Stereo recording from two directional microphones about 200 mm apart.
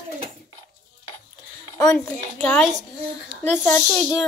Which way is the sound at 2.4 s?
10° left (ahead or behind).